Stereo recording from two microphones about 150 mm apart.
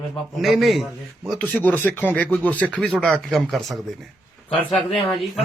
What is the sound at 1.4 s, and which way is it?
Speech, 10° left (ahead or behind).